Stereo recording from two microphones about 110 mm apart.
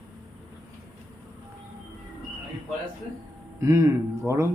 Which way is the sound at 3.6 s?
25° right (ahead or behind).